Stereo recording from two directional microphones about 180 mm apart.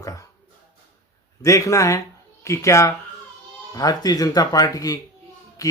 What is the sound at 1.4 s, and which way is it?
Speech, 15° left (ahead or behind).